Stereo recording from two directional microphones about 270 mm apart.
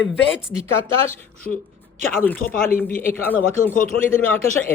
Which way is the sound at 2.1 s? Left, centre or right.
Centre.